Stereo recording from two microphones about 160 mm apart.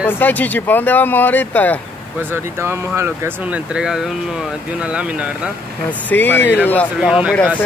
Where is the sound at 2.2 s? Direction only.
15° right (ahead or behind).